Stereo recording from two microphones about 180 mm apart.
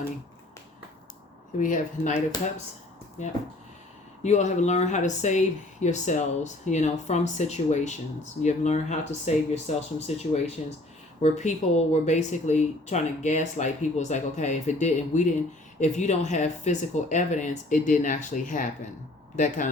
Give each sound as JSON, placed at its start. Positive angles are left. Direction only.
{"t": 1.5, "sound": "speech", "side_deg": 45}
{"t": 3.2, "sound": "speech", "side_deg": 40}